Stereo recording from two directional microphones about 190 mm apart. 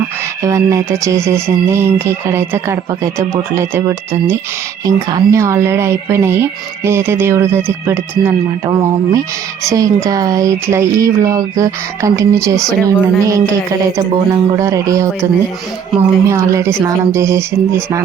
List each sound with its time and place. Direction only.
0.4 s speech: 15° right (ahead or behind)
16.3 s speech: 15° right (ahead or behind)